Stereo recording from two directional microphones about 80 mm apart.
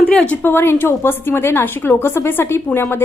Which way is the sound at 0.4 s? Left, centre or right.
Left.